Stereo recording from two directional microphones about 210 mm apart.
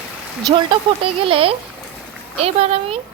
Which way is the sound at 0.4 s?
20° right (ahead or behind).